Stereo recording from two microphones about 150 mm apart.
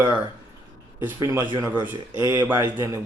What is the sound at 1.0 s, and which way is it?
Speech, 20° right (ahead or behind).